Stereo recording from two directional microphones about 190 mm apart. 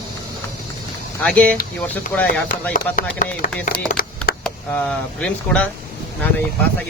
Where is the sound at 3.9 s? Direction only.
50° left (ahead or behind).